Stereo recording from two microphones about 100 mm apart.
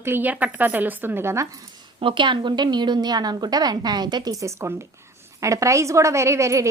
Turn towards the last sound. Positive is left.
turn(degrees=-30)  # may be behind; listen again after turning